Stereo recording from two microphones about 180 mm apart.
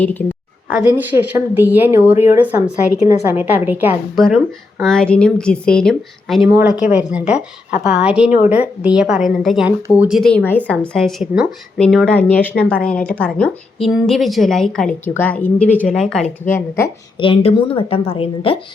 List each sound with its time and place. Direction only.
0.0 s a woman's voice: 10° left (ahead or behind)
0.7 s a woman's voice: 10° right (ahead or behind)
4.8 s speech: 5° left (ahead or behind)
17.2 s a woman's voice: 30° left (ahead or behind)